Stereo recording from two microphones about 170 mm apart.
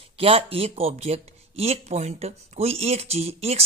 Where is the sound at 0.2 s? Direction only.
35° right (ahead or behind).